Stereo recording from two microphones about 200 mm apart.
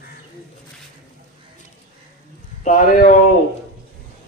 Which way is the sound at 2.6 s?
40° left (ahead or behind).